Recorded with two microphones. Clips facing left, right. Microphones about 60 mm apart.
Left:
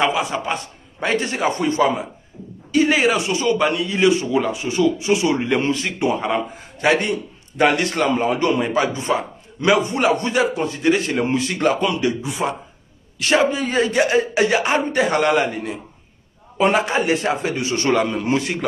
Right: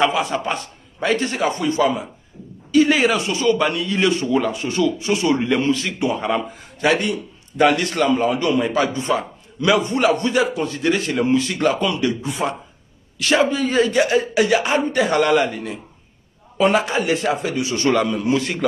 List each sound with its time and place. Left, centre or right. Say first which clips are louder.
0.0 s a man's voice: right 1 dB; centre
1.0 s a man's voice: right 1 dB; left
12.2 s speech: even; centre
13.5 s a man's voice: right 2 dB; left